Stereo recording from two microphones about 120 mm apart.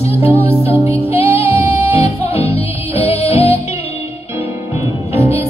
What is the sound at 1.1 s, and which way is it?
Music, 60° left (ahead or behind).